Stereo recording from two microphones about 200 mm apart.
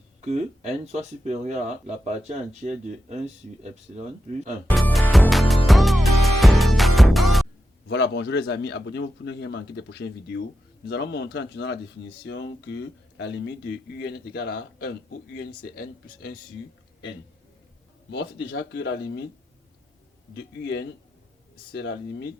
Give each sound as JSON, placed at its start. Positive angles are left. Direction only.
{"t": 0.3, "sound": "speech", "side_deg": -35}
{"t": 4.7, "sound": "music", "side_deg": 0}
{"t": 7.9, "sound": "speech", "side_deg": 60}
{"t": 18.1, "sound": "speech", "side_deg": 60}
{"t": 20.3, "sound": "speech", "side_deg": 60}